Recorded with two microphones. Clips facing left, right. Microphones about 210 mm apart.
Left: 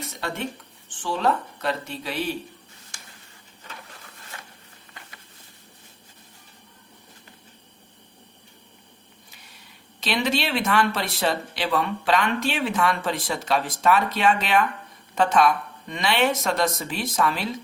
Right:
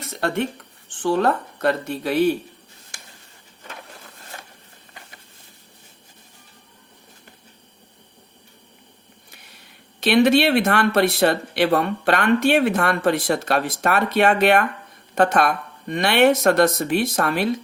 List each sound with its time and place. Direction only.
0.2 s speech: 60° right (ahead or behind)
10.0 s speech: 60° right (ahead or behind)